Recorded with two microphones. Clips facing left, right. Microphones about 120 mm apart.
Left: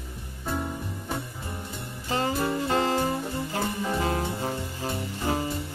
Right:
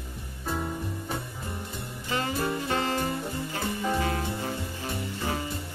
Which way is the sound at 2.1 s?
30° left (ahead or behind).